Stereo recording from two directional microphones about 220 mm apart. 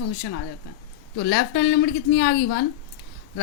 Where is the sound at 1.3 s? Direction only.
55° left (ahead or behind).